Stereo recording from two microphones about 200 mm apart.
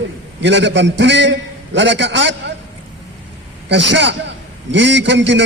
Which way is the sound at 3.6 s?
65° right (ahead or behind).